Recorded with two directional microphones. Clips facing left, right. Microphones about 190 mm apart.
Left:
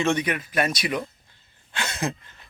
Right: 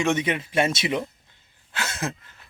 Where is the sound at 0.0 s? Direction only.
20° right (ahead or behind).